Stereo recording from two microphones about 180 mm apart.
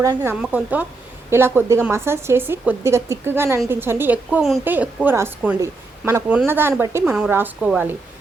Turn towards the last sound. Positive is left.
turn(degrees=-10)  # may be behind; listen again after turning